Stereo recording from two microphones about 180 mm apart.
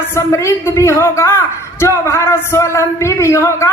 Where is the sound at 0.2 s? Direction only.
15° left (ahead or behind).